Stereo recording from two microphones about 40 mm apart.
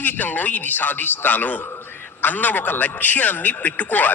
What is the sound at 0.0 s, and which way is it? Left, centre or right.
A man's voice, left.